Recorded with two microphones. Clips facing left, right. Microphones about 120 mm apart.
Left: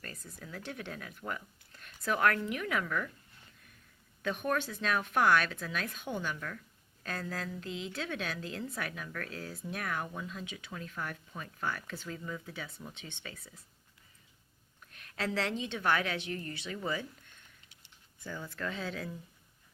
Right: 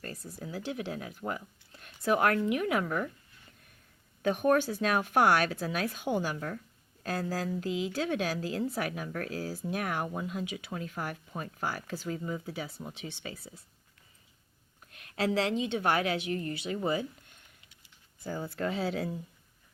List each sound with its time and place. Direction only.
0.0 s speech: 30° right (ahead or behind)
4.2 s speech: 35° right (ahead or behind)
14.9 s a sound: 35° right (ahead or behind)
15.7 s speech: 30° right (ahead or behind)
18.2 s speech: 35° right (ahead or behind)